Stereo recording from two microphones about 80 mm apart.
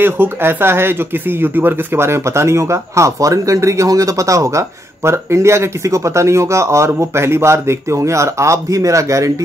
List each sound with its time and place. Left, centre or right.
0.0 s speech: right